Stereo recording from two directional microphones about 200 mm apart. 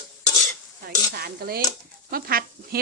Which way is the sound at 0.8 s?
50° right (ahead or behind).